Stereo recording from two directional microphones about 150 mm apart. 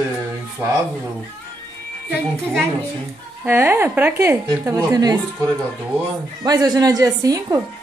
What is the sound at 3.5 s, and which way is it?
A woman's voice, 15° right (ahead or behind).